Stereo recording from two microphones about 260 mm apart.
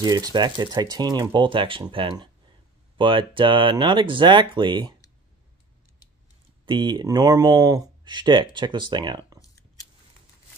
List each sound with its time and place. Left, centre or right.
0.0 s speech: centre
6.6 s speech: centre
9.4 s a sound: centre